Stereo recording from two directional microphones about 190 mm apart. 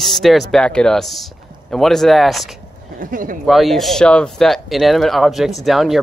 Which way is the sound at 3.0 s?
45° right (ahead or behind).